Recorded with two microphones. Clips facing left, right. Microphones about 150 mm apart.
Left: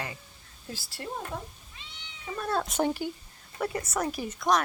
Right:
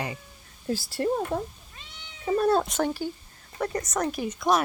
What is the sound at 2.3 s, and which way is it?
Cat, 40° right (ahead or behind).